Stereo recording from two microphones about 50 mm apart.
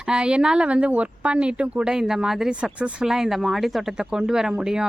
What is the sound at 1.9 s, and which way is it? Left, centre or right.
Speech, centre.